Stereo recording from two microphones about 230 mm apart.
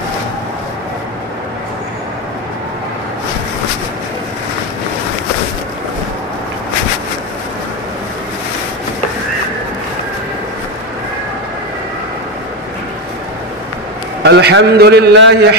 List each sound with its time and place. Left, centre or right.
14.2 s a man's voice: right